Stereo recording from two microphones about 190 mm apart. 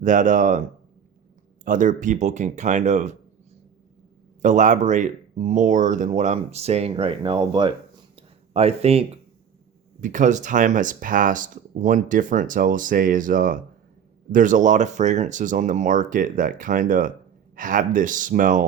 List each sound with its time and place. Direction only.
0.0 s speech: 40° right (ahead or behind)
1.6 s speech: 45° right (ahead or behind)
4.4 s speech: 40° right (ahead or behind)